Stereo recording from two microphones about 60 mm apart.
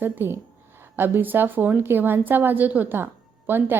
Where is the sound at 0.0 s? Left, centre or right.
Right.